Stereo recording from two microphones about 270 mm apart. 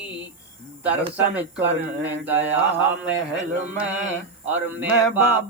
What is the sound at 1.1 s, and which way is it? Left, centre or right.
Speech, centre.